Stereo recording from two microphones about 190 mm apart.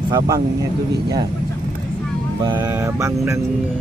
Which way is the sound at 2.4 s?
20° right (ahead or behind).